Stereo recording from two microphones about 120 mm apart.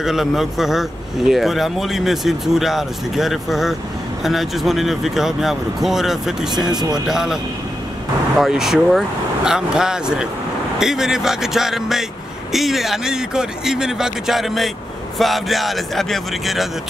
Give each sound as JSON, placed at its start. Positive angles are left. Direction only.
{"t": 0.0, "sound": "a man's voice", "side_deg": -5}
{"t": 6.7, "sound": "speech", "side_deg": -35}
{"t": 7.1, "sound": "a man's voice", "side_deg": -5}
{"t": 8.4, "sound": "a man's voice", "side_deg": -5}